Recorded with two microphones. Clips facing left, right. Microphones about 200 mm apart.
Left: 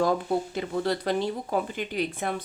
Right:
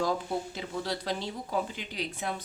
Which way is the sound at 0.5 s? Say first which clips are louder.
Left 7 dB; 55° left (ahead or behind).